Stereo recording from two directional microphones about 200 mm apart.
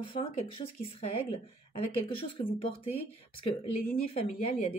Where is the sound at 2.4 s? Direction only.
45° left (ahead or behind).